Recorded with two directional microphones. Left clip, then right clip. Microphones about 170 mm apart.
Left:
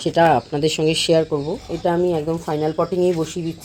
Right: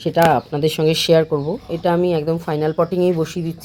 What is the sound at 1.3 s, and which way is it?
A woman's voice, 10° right (ahead or behind).